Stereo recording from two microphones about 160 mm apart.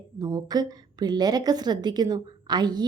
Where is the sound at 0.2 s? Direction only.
25° right (ahead or behind).